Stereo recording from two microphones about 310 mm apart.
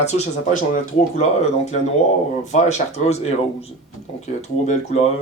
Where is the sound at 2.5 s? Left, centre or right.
Left.